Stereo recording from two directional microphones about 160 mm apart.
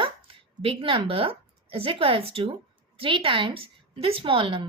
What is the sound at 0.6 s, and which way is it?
A woman's voice, 35° right (ahead or behind).